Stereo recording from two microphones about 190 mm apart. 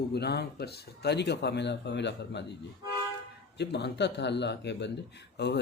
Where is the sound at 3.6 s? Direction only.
60° left (ahead or behind).